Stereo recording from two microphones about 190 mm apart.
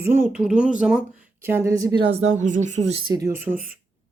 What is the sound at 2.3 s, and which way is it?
Speech, 40° right (ahead or behind).